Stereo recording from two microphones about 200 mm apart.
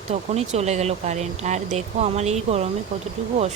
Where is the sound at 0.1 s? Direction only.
35° right (ahead or behind).